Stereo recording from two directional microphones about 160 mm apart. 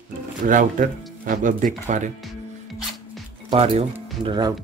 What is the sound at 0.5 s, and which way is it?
Speech, 55° right (ahead or behind).